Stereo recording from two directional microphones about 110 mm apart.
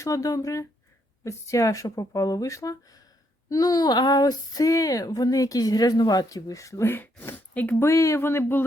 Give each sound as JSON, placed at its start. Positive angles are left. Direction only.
{"t": 0.0, "sound": "speech", "side_deg": 30}